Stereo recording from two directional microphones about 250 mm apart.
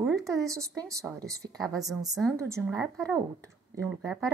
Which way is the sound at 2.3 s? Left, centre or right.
Centre.